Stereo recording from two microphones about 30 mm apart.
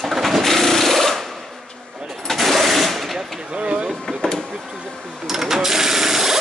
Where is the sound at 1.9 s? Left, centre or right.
Centre.